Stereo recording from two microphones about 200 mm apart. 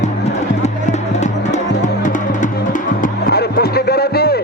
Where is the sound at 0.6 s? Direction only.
35° left (ahead or behind).